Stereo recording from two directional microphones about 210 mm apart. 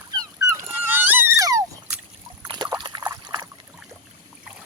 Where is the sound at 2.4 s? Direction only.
20° right (ahead or behind).